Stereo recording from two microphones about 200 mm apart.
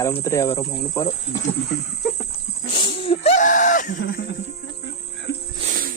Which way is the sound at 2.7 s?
25° left (ahead or behind).